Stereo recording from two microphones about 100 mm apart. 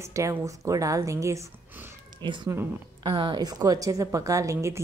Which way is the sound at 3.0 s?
55° right (ahead or behind).